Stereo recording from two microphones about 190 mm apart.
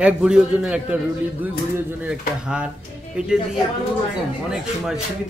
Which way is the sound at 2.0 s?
5° right (ahead or behind).